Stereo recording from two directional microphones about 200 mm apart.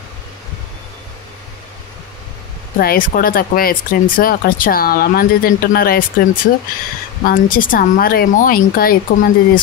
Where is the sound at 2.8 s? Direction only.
45° left (ahead or behind).